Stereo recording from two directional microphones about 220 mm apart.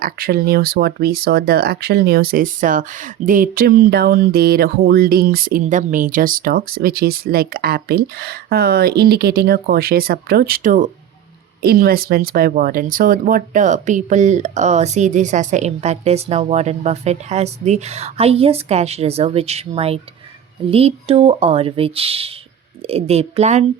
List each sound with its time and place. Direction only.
0.0 s speech: 40° right (ahead or behind)